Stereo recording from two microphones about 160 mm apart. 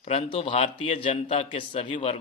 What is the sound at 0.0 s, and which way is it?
A man's voice, 35° left (ahead or behind).